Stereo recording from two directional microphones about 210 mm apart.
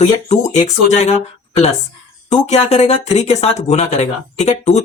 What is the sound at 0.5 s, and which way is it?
Speech, 30° left (ahead or behind).